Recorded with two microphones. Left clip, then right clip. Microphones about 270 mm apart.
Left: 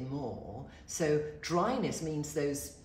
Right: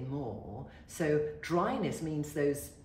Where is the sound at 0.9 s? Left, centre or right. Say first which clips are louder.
Even; centre.